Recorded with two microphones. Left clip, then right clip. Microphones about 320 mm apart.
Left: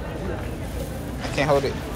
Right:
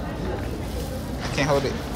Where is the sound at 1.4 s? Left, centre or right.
Centre.